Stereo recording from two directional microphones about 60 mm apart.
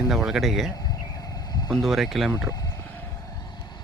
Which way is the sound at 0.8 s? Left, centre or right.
Left.